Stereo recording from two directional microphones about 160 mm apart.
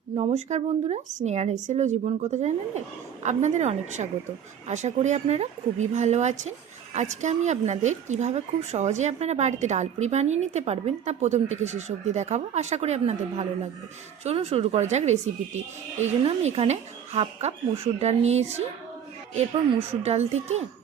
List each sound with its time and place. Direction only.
0.2 s speech: 40° right (ahead or behind)
20.0 s speech: 40° right (ahead or behind)